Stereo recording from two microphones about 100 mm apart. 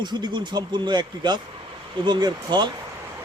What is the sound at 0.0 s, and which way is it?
Speech, 50° right (ahead or behind).